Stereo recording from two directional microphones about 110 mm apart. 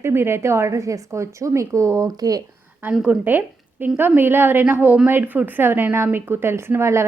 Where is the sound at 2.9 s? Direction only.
10° right (ahead or behind); by 7.1 s 25° right (ahead or behind).